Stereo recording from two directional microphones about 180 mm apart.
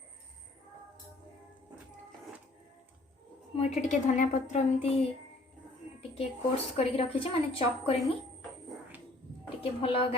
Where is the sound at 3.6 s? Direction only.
40° left (ahead or behind).